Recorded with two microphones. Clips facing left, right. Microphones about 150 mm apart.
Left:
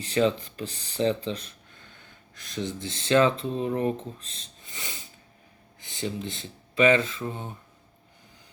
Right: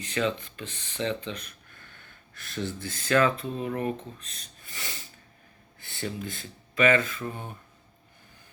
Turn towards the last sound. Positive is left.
turn(degrees=20)  # may be behind; listen again after turning